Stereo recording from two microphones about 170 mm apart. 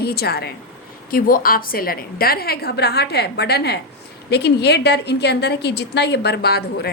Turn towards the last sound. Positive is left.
turn(degrees=70)  # may be behind; listen again after turning